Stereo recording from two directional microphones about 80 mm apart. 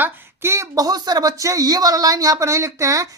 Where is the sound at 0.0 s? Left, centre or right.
Right.